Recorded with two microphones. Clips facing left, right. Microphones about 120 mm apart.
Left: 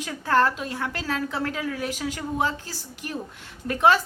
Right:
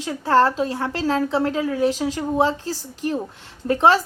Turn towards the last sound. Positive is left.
turn(degrees=-30)  # may be behind; listen again after turning